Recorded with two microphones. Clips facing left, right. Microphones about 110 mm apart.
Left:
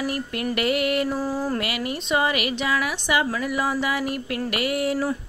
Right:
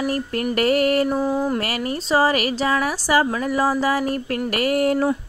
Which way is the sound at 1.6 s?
40° right (ahead or behind).